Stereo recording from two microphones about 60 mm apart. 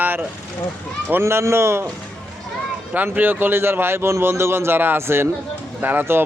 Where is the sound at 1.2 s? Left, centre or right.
Right.